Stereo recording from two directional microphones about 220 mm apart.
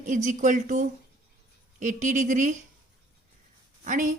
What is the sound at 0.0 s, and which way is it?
A woman's voice, 35° right (ahead or behind).